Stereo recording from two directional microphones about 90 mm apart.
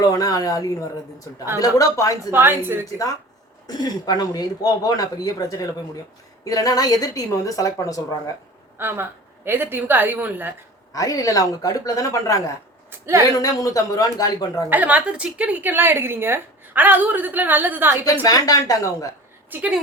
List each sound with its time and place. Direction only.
0.0 s a woman's voice: 40° left (ahead or behind)
2.3 s a woman's voice: 25° right (ahead or behind)
3.7 s a woman's voice: 45° left (ahead or behind)
8.8 s a woman's voice: 25° right (ahead or behind)
10.9 s a woman's voice: 40° left (ahead or behind)
14.7 s a woman's voice: 15° right (ahead or behind)
18.0 s speech: 45° left (ahead or behind)
19.5 s a woman's voice: 20° right (ahead or behind)